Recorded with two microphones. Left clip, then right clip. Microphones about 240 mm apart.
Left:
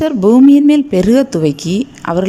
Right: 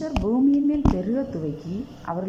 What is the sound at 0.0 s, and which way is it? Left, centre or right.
Speech, left.